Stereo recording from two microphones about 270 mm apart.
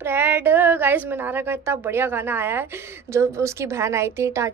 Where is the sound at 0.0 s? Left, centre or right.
Centre.